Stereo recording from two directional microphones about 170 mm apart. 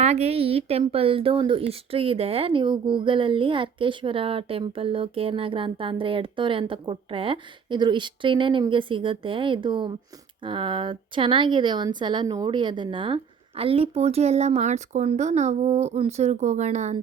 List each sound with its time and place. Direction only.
0.0 s a woman's voice: 40° right (ahead or behind)